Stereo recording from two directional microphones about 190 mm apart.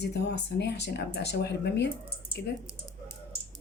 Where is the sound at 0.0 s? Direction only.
60° left (ahead or behind).